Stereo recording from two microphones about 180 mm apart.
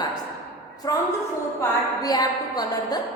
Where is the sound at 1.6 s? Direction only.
20° left (ahead or behind).